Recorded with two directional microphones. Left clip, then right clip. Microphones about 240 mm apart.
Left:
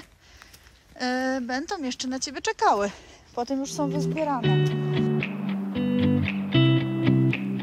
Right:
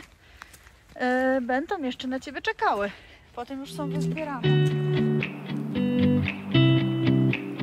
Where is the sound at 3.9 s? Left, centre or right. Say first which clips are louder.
Left 3 dB; centre.